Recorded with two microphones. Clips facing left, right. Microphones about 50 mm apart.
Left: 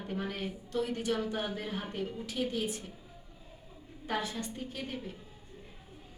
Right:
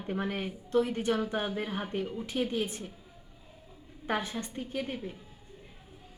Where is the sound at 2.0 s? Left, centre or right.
Centre.